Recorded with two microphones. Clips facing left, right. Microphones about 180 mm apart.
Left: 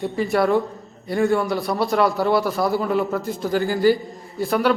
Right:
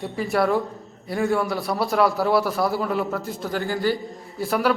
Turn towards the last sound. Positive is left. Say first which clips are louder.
# left 2 dB
turn(degrees=0)  # may be behind; listen again after turning